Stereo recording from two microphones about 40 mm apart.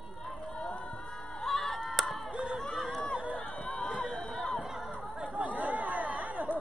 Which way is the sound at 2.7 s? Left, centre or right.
Centre.